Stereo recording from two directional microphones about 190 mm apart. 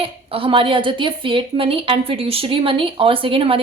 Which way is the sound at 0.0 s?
30° right (ahead or behind).